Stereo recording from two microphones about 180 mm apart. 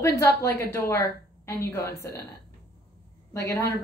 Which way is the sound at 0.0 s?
15° left (ahead or behind).